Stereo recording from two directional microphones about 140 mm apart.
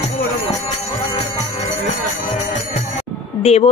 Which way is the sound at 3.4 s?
50° left (ahead or behind).